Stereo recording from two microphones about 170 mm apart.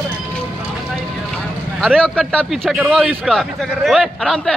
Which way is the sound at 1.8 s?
5° left (ahead or behind).